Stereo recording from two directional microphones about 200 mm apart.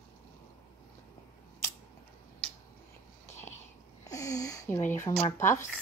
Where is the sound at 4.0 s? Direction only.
15° left (ahead or behind).